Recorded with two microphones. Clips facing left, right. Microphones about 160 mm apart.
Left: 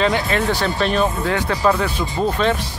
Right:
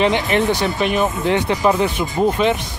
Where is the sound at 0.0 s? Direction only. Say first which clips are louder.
Right 2 dB; 20° right (ahead or behind).